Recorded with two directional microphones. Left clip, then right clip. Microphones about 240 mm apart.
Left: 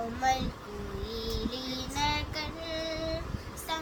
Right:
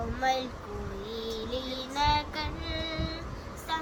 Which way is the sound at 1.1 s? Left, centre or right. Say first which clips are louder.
Right 2 dB; centre.